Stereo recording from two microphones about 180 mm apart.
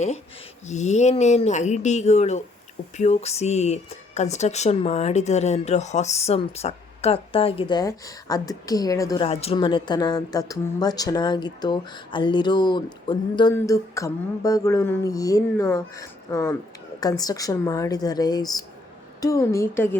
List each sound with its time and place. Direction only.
0.7 s speech: 40° left (ahead or behind); by 9.2 s 20° left (ahead or behind)
9.2 s speech: 35° left (ahead or behind); by 20.0 s 15° left (ahead or behind)